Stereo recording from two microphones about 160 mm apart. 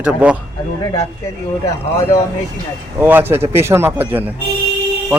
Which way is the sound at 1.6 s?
20° left (ahead or behind).